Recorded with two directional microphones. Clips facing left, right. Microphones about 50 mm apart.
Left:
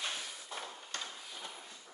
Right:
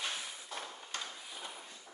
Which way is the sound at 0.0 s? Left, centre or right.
Centre.